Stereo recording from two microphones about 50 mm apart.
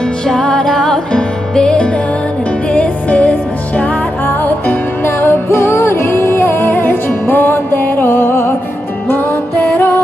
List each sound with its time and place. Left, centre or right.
0.4 s music: centre; by 5.4 s left
5.6 s music: left